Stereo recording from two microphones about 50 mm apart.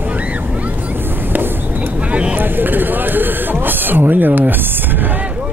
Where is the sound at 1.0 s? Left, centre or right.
Right.